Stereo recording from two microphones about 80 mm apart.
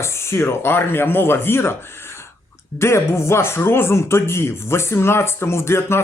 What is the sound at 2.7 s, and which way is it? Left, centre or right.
A man's voice, left.